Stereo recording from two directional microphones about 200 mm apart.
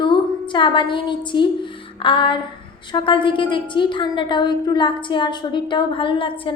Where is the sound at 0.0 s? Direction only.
25° left (ahead or behind).